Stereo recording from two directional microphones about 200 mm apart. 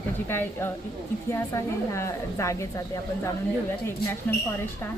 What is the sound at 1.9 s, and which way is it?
Speech, 15° left (ahead or behind).